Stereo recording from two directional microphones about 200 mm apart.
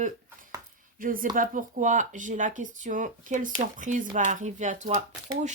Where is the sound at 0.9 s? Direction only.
45° right (ahead or behind).